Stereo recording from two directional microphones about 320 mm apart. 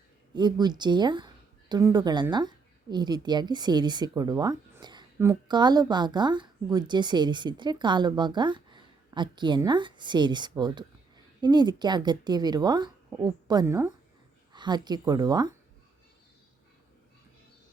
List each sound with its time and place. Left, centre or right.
0.3 s a woman's voice: centre